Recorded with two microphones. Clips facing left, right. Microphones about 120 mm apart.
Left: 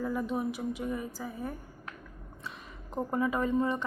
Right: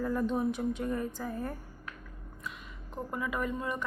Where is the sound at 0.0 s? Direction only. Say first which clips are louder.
Right 2 dB; 5° left (ahead or behind).